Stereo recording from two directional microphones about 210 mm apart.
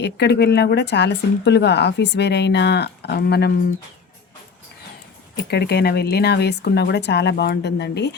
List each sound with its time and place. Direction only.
0.0 s speech: 50° left (ahead or behind)
5.4 s speech: 50° left (ahead or behind)